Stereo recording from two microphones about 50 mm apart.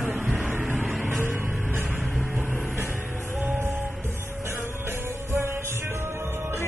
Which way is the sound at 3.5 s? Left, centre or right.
Right.